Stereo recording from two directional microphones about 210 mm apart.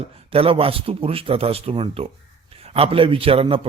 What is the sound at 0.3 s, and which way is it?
A man's voice, 25° right (ahead or behind).